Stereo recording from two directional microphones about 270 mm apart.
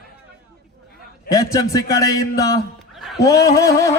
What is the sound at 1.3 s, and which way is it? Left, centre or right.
Music, centre.